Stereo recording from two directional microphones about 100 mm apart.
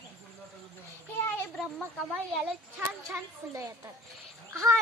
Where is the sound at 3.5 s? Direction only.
30° right (ahead or behind).